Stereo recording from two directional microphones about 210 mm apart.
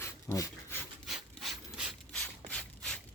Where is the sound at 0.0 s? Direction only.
15° left (ahead or behind).